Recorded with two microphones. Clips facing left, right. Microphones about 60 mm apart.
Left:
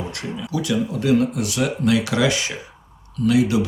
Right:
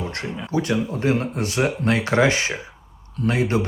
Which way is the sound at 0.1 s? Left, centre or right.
Right.